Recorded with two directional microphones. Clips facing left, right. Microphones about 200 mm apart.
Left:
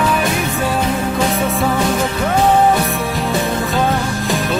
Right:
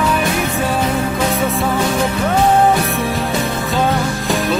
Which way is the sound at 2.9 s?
Centre (ahead or behind).